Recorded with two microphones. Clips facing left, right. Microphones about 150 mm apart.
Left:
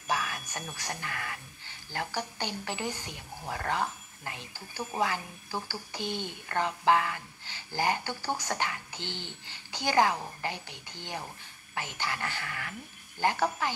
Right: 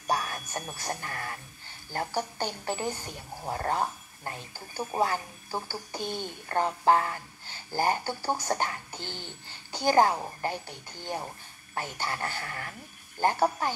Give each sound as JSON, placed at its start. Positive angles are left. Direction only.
{"t": 0.0, "sound": "a woman's voice", "side_deg": -40}